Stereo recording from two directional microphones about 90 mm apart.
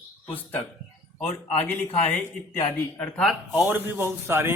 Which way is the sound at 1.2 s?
15° left (ahead or behind).